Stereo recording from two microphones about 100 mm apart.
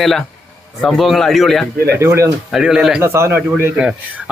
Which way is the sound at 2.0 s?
30° right (ahead or behind).